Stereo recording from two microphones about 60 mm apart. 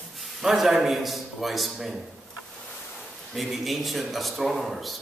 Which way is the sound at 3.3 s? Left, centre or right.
Centre.